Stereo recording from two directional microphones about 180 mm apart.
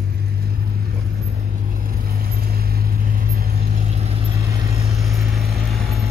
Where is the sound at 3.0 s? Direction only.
55° right (ahead or behind).